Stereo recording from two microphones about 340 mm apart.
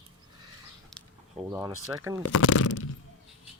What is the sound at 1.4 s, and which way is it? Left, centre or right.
Speech, centre.